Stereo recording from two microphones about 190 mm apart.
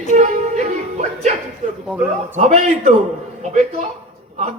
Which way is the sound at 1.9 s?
5° right (ahead or behind).